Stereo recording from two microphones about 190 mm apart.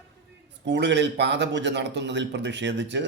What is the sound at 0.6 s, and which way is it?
A man's voice, 70° right (ahead or behind).